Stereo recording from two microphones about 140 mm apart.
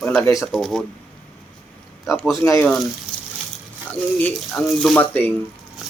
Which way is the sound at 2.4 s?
15° left (ahead or behind).